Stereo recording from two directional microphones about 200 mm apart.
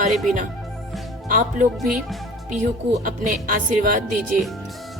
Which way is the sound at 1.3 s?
40° right (ahead or behind).